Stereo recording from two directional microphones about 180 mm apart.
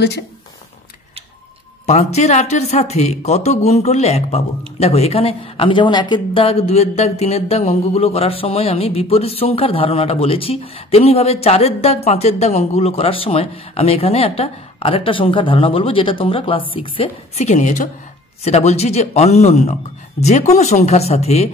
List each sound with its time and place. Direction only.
1.9 s speech: 40° left (ahead or behind)